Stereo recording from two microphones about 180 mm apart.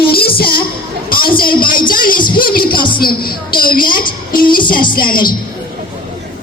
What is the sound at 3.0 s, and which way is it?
A woman's voice, 55° left (ahead or behind).